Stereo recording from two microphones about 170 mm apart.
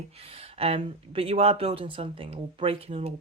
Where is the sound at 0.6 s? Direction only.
35° right (ahead or behind).